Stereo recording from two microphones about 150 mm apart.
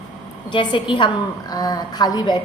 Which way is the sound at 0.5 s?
35° left (ahead or behind).